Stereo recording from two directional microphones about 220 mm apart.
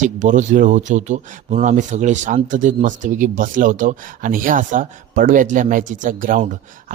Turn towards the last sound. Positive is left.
turn(degrees=-35)  # may be behind; listen again after turning